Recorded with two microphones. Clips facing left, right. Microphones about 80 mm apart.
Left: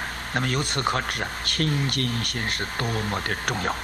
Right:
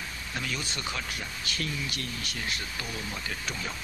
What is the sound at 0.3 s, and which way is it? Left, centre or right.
Speech, left.